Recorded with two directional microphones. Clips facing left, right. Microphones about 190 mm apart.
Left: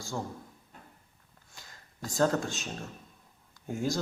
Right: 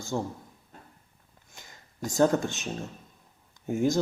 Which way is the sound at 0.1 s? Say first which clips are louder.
Right 5 dB; 20° right (ahead or behind).